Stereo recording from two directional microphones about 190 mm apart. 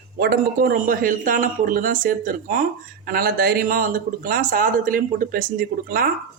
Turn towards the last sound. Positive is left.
turn(degrees=-50)  # may be behind; listen again after turning